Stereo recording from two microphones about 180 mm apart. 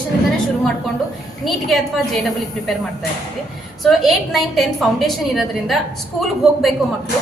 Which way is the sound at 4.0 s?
Centre (ahead or behind).